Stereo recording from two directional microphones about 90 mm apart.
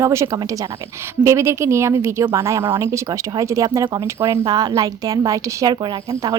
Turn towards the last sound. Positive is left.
turn(degrees=-40)  # may be behind; listen again after turning